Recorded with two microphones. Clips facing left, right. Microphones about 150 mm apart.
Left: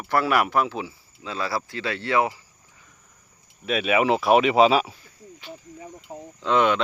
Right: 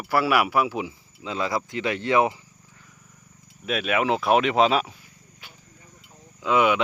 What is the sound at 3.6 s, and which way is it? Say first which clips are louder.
Speech: left 2 dB; centre (ahead or behind).